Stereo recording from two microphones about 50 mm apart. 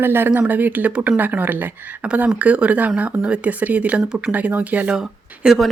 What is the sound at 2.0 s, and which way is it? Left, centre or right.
Speech, right.